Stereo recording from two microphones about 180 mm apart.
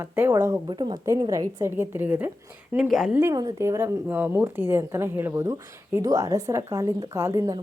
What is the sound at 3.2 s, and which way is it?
A woman's voice, 20° right (ahead or behind).